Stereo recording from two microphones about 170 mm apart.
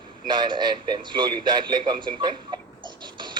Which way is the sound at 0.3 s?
25° right (ahead or behind).